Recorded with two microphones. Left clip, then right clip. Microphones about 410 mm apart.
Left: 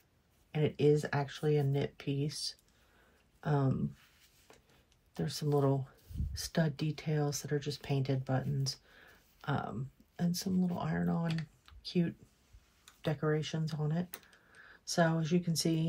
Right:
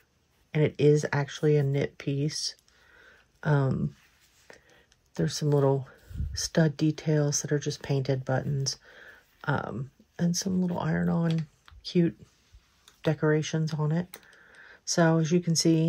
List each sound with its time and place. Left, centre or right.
0.5 s speech: centre
5.1 s speech: centre